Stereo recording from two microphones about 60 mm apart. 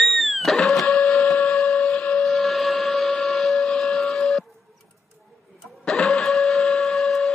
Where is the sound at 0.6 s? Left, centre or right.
Centre.